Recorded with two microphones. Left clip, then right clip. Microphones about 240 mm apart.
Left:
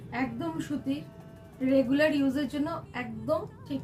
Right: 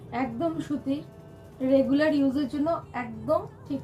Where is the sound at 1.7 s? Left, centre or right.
Left.